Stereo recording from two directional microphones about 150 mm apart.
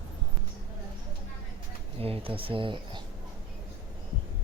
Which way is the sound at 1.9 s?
40° right (ahead or behind).